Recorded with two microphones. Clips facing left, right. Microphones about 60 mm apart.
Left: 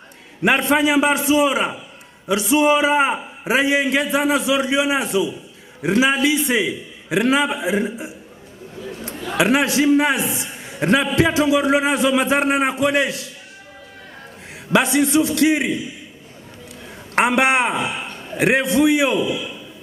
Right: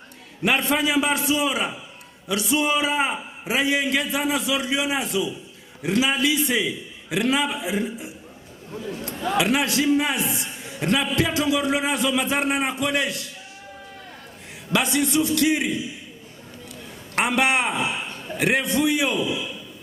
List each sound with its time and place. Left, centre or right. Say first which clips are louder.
0.4 s a man's voice: left 5 dB; left
9.4 s a man's voice: left 6 dB; left
14.7 s a man's voice: left 6 dB; left
17.1 s a man's voice: left 5 dB; left